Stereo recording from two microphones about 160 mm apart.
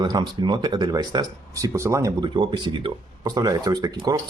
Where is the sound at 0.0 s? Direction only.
25° right (ahead or behind).